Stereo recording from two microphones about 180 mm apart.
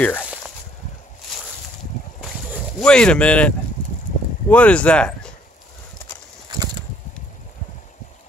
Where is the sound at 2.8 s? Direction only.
5° left (ahead or behind).